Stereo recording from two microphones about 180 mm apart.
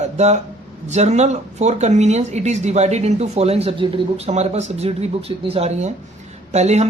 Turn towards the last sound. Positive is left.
turn(degrees=-40)  # may be behind; listen again after turning